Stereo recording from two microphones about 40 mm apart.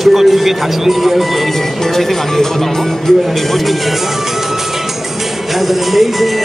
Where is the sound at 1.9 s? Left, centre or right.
Centre.